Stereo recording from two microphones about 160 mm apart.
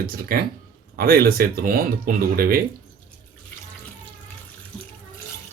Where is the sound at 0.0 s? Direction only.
70° right (ahead or behind).